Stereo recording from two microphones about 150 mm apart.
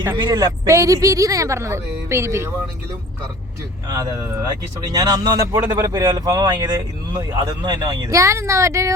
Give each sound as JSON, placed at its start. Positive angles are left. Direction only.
{"t": 0.1, "sound": "speech", "side_deg": -25}
{"t": 3.8, "sound": "speech", "side_deg": -25}